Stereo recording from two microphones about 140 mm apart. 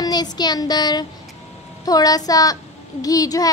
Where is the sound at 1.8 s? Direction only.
25° left (ahead or behind).